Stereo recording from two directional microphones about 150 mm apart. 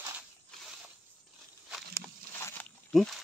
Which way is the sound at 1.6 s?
Centre (ahead or behind).